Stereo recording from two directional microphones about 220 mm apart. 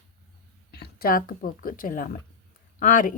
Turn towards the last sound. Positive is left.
turn(degrees=35)  # may be behind; listen again after turning